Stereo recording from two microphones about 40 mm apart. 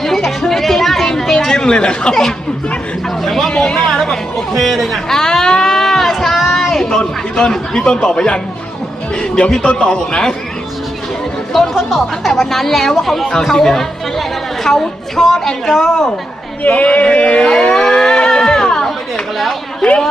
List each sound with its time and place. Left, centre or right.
0.0 s chatter: centre
1.4 s speech: centre
3.2 s speech: centre
3.5 s speech: left
3.8 s speech: centre
6.4 s a sound: centre
7.0 s speech: left
9.6 s speech: left
11.5 s speech: centre
14.2 s chatter: centre
15.6 s speech: centre
16.6 s speech: left; by 18.9 s centre